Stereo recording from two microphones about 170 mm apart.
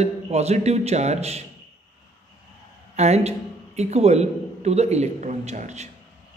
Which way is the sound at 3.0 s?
40° right (ahead or behind).